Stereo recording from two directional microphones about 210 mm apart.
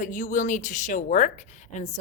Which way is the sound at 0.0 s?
40° left (ahead or behind).